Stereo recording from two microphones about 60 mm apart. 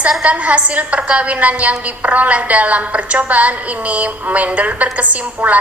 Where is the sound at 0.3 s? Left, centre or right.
Right.